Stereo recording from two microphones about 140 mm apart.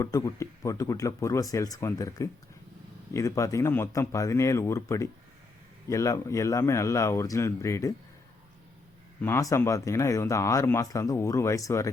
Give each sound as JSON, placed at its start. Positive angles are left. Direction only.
{"t": 0.0, "sound": "speech", "side_deg": 20}
{"t": 9.2, "sound": "speech", "side_deg": 20}